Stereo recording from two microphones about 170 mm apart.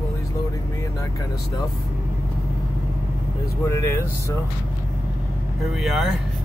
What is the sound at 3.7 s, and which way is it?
Speech, 20° left (ahead or behind).